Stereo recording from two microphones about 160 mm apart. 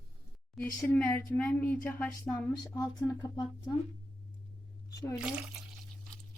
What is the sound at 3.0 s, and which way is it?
Speech, 25° left (ahead or behind).